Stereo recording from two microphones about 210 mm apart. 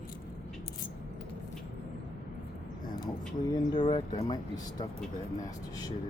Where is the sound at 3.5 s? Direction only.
20° left (ahead or behind).